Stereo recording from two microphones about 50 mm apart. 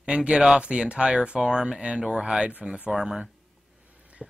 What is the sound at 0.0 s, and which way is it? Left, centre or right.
Speech, right.